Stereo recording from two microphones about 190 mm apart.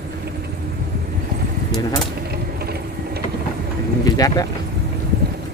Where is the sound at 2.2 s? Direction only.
55° right (ahead or behind).